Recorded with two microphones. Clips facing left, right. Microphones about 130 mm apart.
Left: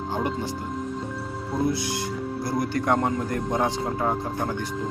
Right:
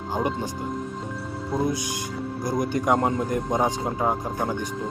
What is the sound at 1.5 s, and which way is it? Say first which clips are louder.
Speech: left 1 dB; 15° right (ahead or behind).